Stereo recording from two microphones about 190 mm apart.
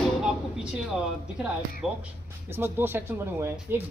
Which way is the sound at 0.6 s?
5° right (ahead or behind).